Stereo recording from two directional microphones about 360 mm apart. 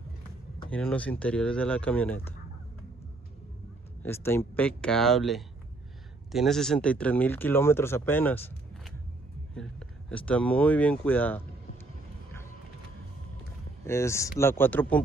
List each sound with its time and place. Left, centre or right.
0.7 s speech: centre
4.0 s speech: centre
13.8 s speech: centre